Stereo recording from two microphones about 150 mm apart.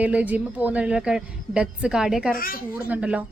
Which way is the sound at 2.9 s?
10° right (ahead or behind).